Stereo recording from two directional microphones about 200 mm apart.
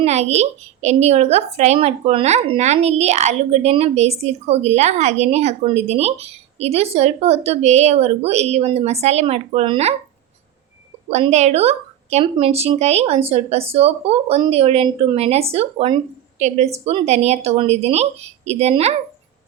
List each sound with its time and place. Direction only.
0.0 s a woman's voice: 35° right (ahead or behind)
11.1 s a woman's voice: 35° right (ahead or behind)